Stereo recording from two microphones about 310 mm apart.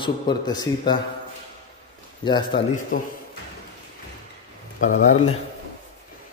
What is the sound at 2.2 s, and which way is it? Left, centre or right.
Speech, centre.